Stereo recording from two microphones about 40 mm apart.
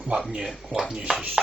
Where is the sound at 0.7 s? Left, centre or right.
Centre.